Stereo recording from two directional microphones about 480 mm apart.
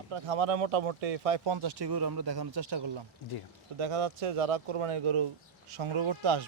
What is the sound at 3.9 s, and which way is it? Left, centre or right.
Speech, right.